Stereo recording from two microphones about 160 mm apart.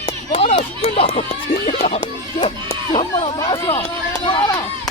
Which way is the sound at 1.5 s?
60° left (ahead or behind).